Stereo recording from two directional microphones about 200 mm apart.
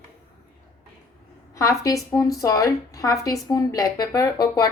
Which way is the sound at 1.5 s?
15° left (ahead or behind).